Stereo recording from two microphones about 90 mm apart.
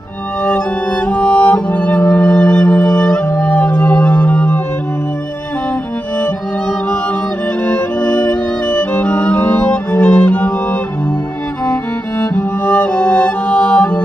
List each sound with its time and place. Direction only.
1.0 s music: 15° left (ahead or behind)
7.6 s music: 15° left (ahead or behind)
8.6 s violin: 20° left (ahead or behind)
12.4 s music: 20° left (ahead or behind)